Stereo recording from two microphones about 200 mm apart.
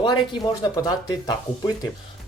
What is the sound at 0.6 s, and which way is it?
Speech, 20° left (ahead or behind).